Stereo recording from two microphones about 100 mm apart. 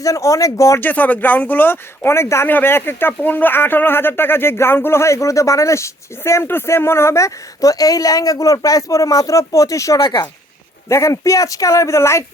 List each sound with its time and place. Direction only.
0.0 s speech: 35° left (ahead or behind)
0.8 s speech: 15° left (ahead or behind); by 10.0 s 30° left (ahead or behind)
10.0 s speech: 50° left (ahead or behind)
10.8 s speech: 30° left (ahead or behind)